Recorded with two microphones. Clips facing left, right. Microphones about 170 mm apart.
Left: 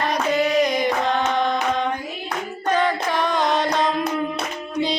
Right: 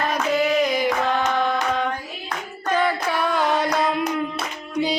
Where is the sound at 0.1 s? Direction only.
5° right (ahead or behind).